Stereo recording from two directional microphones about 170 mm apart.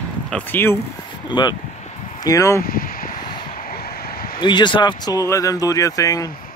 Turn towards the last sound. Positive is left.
turn(degrees=20)  # may be behind; listen again after turning